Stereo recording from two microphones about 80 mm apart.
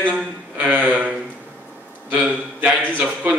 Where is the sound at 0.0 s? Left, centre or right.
Centre.